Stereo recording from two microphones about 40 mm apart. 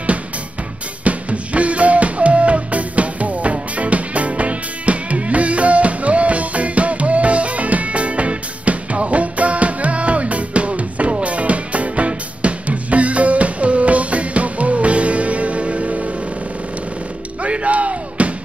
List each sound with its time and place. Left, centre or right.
1.0 s music: right
17.4 s music: right